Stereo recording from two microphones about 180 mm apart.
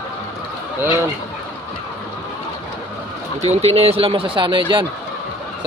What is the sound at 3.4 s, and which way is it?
Speech, 35° right (ahead or behind).